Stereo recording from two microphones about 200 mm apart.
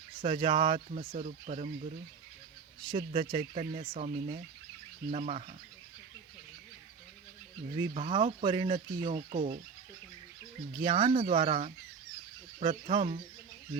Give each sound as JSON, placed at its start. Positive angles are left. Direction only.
{"t": 0.2, "sound": "speech", "side_deg": -25}
{"t": 2.9, "sound": "speech", "side_deg": -25}
{"t": 5.1, "sound": "speech", "side_deg": -35}
{"t": 7.8, "sound": "speech", "side_deg": -30}
{"t": 8.4, "sound": "speech", "side_deg": -25}
{"t": 10.8, "sound": "speech", "side_deg": -25}